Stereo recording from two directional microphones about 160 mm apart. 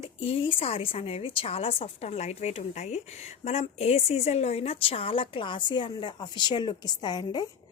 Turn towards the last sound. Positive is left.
turn(degrees=25)  # may be behind; listen again after turning